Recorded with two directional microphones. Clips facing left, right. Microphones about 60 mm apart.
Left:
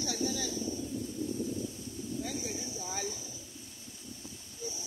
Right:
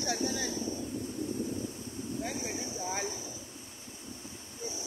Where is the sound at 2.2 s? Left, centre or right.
Right.